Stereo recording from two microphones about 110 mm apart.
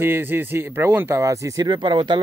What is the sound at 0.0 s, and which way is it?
Speech, 20° right (ahead or behind).